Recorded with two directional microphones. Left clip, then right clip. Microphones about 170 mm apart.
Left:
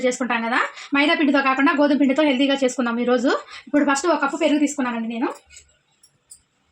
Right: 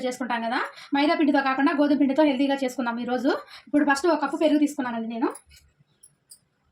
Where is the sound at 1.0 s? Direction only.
30° left (ahead or behind).